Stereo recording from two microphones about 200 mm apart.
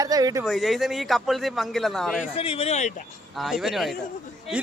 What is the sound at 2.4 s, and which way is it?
Speech, 30° left (ahead or behind).